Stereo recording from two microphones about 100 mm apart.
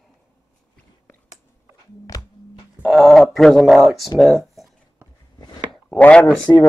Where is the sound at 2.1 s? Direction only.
35° left (ahead or behind).